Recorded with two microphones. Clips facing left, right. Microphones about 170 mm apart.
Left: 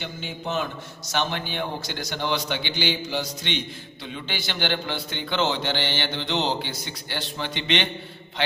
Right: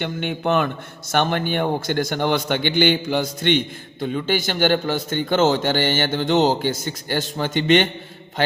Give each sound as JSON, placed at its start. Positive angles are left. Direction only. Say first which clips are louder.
{"t": 0.0, "sound": "a man's voice", "louder": "right 9 dB", "side_deg": -65}